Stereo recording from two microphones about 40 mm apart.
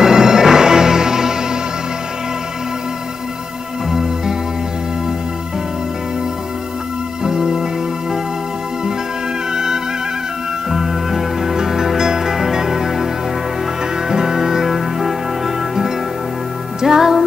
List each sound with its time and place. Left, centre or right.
0.0 s music: centre
7.2 s music: centre
9.5 s music: centre
10.7 s music: centre